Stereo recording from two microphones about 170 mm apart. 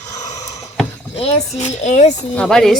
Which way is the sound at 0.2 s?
45° left (ahead or behind).